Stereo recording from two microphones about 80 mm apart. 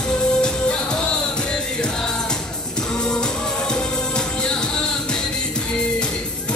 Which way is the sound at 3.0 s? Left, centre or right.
Centre.